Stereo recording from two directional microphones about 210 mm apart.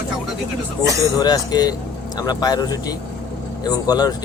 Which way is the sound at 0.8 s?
15° right (ahead or behind).